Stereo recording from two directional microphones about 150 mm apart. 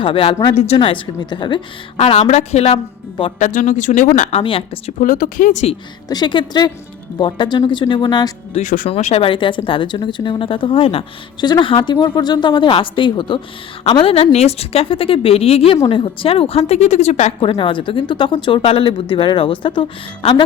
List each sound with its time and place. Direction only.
0.0 s a woman's voice: 40° left (ahead or behind)
2.0 s speech: 45° left (ahead or behind)
2.7 s speech: 35° left (ahead or behind)
3.3 s speech: 55° left (ahead or behind)
4.3 s a woman's voice: 40° left (ahead or behind)
4.9 s speech: 60° left (ahead or behind)
6.1 s a woman's voice: 30° left (ahead or behind)
8.6 s speech: 65° left (ahead or behind)
8.9 s a woman's voice: 45° left (ahead or behind)